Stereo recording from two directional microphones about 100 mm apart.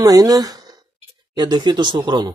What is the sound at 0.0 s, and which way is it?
Speech, 40° right (ahead or behind).